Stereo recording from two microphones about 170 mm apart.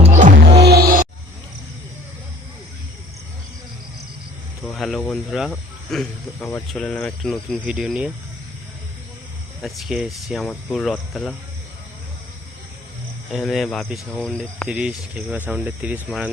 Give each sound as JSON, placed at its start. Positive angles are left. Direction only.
{"t": 0.0, "sound": "music", "side_deg": -45}
{"t": 0.6, "sound": "music", "side_deg": -65}
{"t": 4.6, "sound": "a sound", "side_deg": 0}
{"t": 6.7, "sound": "speech", "side_deg": 5}
{"t": 9.6, "sound": "speech", "side_deg": 0}
{"t": 13.3, "sound": "speech", "side_deg": 0}
{"t": 14.7, "sound": "speech", "side_deg": -5}